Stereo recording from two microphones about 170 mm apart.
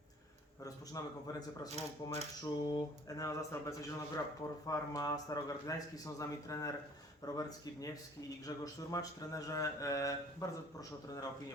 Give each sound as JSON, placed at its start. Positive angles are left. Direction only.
{"t": 0.6, "sound": "speech", "side_deg": 20}